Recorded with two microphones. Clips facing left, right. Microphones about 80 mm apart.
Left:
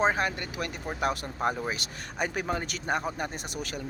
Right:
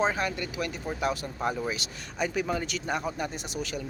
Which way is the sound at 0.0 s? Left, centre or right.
Left.